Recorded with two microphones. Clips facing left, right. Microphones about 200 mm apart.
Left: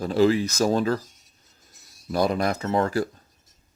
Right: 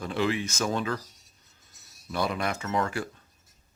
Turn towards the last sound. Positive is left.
turn(degrees=35)  # may be behind; listen again after turning